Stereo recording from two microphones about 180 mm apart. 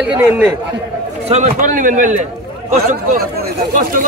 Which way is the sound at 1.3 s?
40° right (ahead or behind).